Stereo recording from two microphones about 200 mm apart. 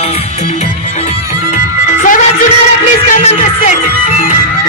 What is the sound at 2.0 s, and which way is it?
Music, 40° left (ahead or behind).